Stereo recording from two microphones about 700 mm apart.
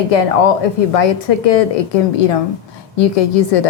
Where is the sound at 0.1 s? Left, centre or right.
Left.